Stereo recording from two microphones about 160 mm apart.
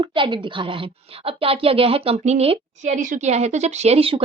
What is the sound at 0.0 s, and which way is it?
Speech, 30° right (ahead or behind).